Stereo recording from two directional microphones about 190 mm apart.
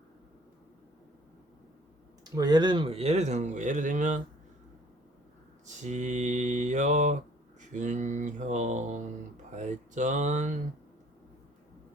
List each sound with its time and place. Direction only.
2.2 s speech: 20° right (ahead or behind); by 4.2 s 40° right (ahead or behind)
5.6 s speech: 40° right (ahead or behind)